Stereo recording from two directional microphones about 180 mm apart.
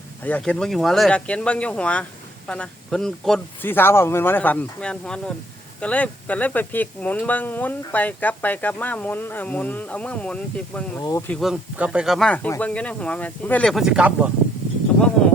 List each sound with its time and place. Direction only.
0.2 s speech: 10° left (ahead or behind)
11.0 s speech: 20° left (ahead or behind)
11.3 s speech: centre (ahead or behind)